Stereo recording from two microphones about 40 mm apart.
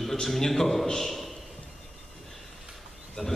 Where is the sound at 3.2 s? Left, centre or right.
Centre.